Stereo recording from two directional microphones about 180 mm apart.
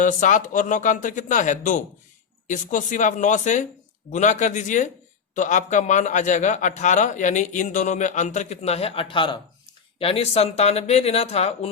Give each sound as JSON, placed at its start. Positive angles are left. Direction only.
{"t": 0.0, "sound": "a man's voice", "side_deg": 45}